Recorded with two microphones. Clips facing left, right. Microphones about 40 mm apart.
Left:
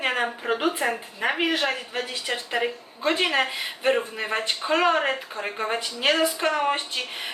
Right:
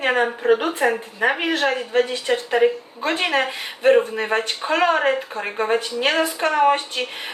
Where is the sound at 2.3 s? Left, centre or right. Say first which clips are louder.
Right 5 dB; centre.